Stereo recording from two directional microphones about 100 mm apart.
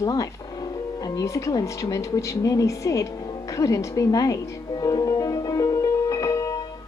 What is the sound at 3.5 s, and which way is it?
Music, 35° left (ahead or behind).